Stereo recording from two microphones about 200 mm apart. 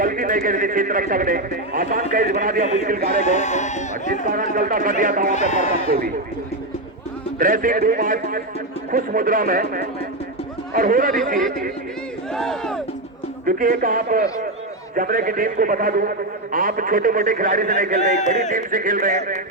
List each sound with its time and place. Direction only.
0.0 s a man's voice: 45° right (ahead or behind)
3.2 s speech: 35° left (ahead or behind)
4.3 s a man's voice: 45° right (ahead or behind)
5.3 s speech: 35° left (ahead or behind)
7.3 s a man's voice: 45° right (ahead or behind)
12.3 s speech: centre (ahead or behind)
13.4 s a man's voice: 45° right (ahead or behind)